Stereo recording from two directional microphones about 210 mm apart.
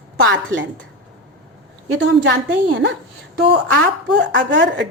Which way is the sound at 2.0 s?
55° right (ahead or behind).